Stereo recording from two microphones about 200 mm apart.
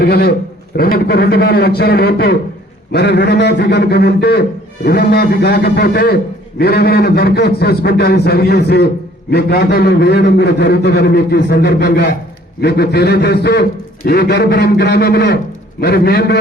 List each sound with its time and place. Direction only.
0.0 s a man's voice: 50° left (ahead or behind)